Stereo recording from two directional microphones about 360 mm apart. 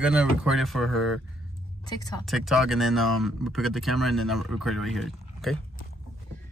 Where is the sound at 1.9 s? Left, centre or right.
Centre.